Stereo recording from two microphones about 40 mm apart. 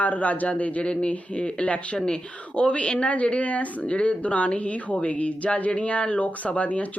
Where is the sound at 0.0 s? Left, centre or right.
Left.